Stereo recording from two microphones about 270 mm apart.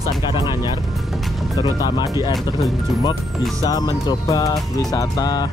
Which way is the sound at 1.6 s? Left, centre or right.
Centre.